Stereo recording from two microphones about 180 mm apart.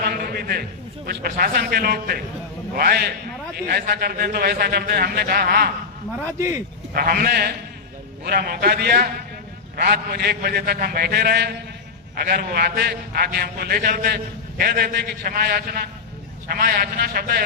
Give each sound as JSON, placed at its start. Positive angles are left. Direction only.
{"t": 0.0, "sound": "a sound", "side_deg": -55}
{"t": 1.0, "sound": "a man's voice", "side_deg": -55}
{"t": 6.9, "sound": "a man's voice", "side_deg": -55}